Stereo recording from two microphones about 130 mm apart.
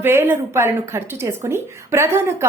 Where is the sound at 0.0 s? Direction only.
15° right (ahead or behind).